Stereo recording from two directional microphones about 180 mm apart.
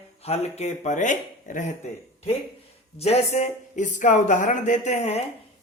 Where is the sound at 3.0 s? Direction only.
35° left (ahead or behind).